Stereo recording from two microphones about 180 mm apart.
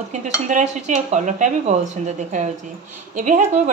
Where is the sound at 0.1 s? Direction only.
40° right (ahead or behind).